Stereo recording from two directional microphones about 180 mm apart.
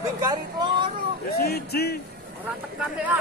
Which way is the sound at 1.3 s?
60° left (ahead or behind).